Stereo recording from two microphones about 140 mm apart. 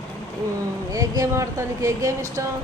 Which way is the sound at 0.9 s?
25° right (ahead or behind).